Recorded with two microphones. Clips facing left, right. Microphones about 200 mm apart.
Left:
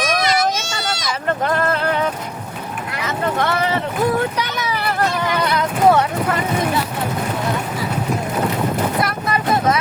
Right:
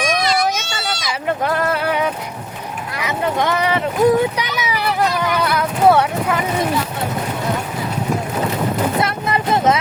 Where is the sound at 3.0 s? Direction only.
15° right (ahead or behind).